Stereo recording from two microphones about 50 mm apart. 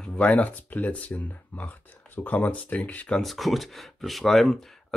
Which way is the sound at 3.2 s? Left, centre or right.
Centre.